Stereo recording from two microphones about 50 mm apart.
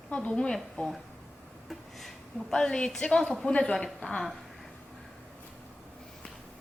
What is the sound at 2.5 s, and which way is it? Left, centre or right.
A woman's voice, centre.